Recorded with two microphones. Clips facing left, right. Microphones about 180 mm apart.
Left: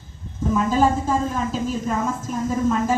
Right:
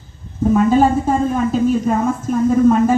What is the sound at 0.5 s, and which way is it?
A woman's voice, 60° right (ahead or behind).